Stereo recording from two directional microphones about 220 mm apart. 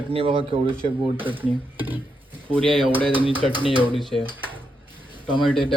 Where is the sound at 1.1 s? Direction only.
10° right (ahead or behind).